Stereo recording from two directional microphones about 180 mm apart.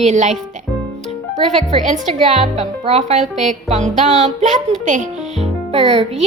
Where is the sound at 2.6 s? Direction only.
35° right (ahead or behind).